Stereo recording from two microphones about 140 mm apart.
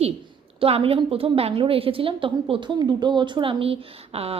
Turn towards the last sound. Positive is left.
turn(degrees=-45)  # may be behind; listen again after turning